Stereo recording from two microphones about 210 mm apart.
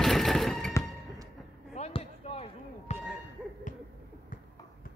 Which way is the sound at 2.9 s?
5° right (ahead or behind).